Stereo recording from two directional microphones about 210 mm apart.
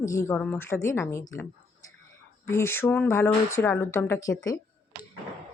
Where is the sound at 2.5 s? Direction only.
10° left (ahead or behind).